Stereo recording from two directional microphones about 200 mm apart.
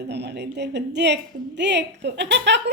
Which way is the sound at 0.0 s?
55° right (ahead or behind).